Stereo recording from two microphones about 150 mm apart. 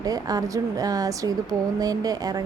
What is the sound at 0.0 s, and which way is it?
Speech, 25° right (ahead or behind).